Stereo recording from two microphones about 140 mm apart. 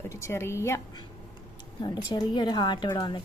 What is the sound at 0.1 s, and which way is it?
Speech, 20° left (ahead or behind).